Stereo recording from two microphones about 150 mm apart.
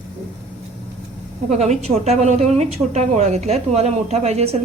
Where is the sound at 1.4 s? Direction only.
50° right (ahead or behind).